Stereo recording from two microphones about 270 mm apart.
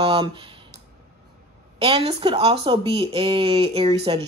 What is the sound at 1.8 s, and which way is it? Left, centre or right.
Speech, right.